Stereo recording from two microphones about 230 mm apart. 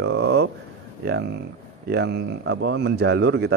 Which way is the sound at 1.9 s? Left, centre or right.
Right.